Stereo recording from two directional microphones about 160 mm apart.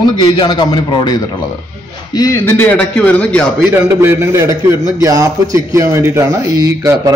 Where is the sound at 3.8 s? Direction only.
15° right (ahead or behind).